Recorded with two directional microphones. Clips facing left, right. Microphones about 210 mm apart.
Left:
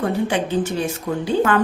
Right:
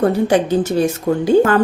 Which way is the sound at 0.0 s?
40° right (ahead or behind).